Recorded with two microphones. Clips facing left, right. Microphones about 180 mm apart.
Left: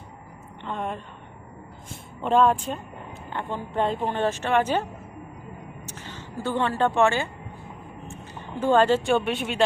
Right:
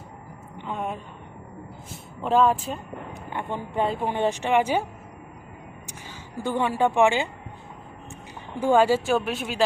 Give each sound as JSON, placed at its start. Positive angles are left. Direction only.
{"t": 0.6, "sound": "a sound", "side_deg": -5}
{"t": 2.2, "sound": "speech", "side_deg": -5}
{"t": 3.2, "sound": "speech", "side_deg": -15}
{"t": 6.1, "sound": "a woman's voice", "side_deg": -15}
{"t": 8.5, "sound": "speech", "side_deg": -10}